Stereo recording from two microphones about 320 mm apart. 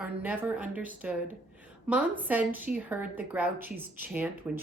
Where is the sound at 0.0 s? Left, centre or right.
Centre.